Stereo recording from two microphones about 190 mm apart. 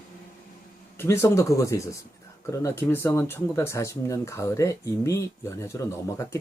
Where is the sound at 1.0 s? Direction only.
15° left (ahead or behind).